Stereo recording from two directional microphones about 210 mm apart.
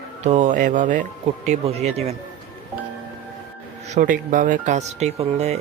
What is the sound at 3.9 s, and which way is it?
Speech, 40° right (ahead or behind).